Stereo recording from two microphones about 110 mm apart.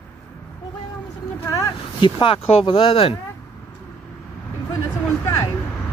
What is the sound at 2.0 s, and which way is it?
Speech, 55° left (ahead or behind).